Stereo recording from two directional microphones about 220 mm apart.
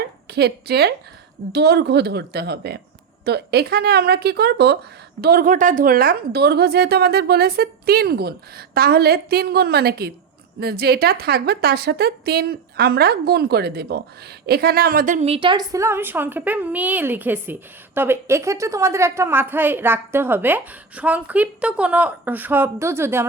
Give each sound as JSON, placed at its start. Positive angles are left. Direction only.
{"t": 0.3, "sound": "a woman's voice", "side_deg": -45}